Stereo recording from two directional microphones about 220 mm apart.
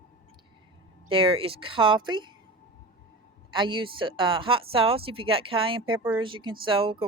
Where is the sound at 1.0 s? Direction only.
25° right (ahead or behind).